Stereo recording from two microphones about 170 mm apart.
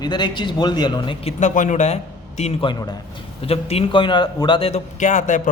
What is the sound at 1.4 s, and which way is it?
A man's voice, 45° left (ahead or behind).